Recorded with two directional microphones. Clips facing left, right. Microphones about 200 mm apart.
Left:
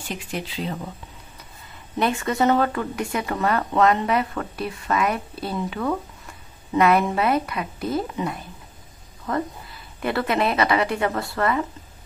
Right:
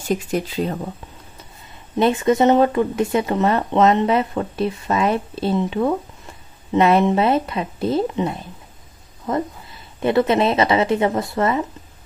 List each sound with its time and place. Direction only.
0.1 s speech: 45° right (ahead or behind)
2.0 s a woman's voice: 20° right (ahead or behind)